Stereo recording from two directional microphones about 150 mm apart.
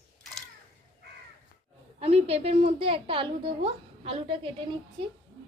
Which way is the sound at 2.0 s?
40° right (ahead or behind).